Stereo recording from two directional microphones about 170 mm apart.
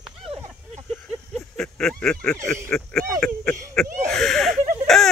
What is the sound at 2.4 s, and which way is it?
Speech, 5° left (ahead or behind).